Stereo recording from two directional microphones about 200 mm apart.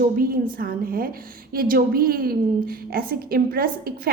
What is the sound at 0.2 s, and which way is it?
A woman's voice, 45° right (ahead or behind).